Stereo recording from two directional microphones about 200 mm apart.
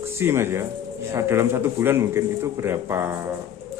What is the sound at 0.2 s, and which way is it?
A man's voice, 10° right (ahead or behind).